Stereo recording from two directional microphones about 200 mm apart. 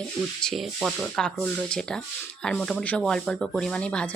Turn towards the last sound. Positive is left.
turn(degrees=5)  # may be behind; listen again after turning